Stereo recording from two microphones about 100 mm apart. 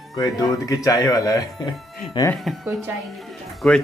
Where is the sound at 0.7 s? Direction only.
35° left (ahead or behind).